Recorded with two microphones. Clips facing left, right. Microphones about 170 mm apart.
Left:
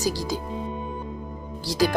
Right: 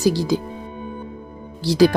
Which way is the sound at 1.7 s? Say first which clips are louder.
Right 8 dB; 65° right (ahead or behind).